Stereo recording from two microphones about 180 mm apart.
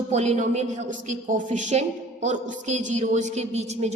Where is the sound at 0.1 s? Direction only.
40° right (ahead or behind).